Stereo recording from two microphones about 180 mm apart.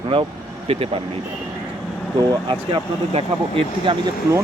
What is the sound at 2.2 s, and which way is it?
Speech, 25° right (ahead or behind).